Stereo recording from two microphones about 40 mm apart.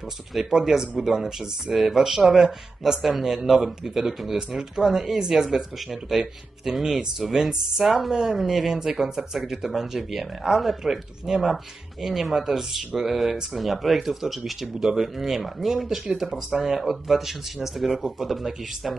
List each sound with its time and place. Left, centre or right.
0.3 s speech: centre